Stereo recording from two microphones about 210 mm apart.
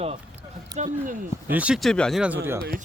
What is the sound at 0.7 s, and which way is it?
Speech, 20° right (ahead or behind).